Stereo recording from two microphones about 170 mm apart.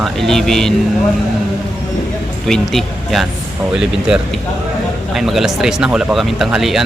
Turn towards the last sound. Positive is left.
turn(degrees=0)  # may be behind; listen again after turning